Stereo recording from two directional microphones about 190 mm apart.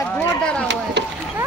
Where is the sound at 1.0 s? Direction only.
60° right (ahead or behind).